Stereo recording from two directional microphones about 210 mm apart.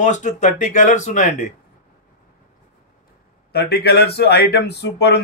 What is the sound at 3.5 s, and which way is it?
Speech, 50° left (ahead or behind).